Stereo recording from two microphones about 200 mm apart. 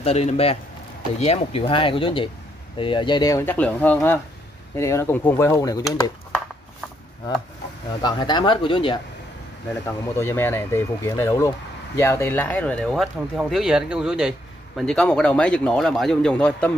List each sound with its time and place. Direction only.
0.0 s speech: 30° left (ahead or behind)
8.0 s speech: 20° left (ahead or behind)
10.1 s speech: 10° left (ahead or behind)